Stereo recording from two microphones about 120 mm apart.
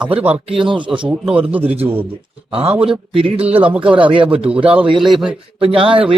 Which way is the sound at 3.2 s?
45° right (ahead or behind).